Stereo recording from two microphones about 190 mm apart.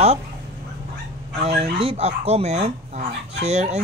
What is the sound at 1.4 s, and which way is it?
Speech, 30° right (ahead or behind).